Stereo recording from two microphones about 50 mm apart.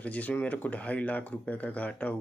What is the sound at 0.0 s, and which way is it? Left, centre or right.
Speech, left.